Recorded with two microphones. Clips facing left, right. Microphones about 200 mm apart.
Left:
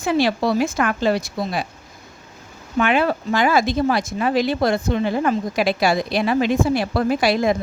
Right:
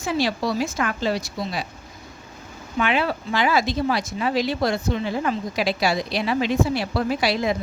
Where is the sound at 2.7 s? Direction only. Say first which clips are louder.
Left 4 dB; 50° left (ahead or behind).